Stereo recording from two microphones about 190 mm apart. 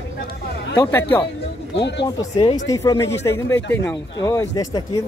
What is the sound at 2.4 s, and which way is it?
Speech, 30° left (ahead or behind).